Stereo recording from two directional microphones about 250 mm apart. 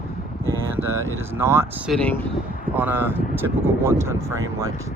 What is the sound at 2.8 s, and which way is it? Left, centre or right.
Speech, centre.